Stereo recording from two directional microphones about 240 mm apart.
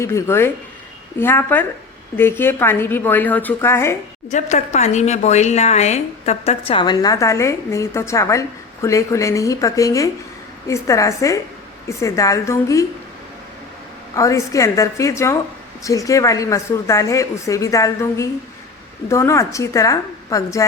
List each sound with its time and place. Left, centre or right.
0.0 s speech: centre
4.3 s speech: left; by 12.8 s centre
14.2 s speech: centre